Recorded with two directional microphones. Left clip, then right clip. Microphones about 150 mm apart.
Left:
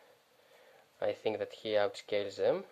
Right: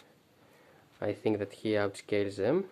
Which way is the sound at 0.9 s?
25° left (ahead or behind).